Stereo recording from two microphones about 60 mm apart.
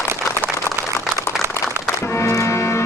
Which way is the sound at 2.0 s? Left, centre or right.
Left.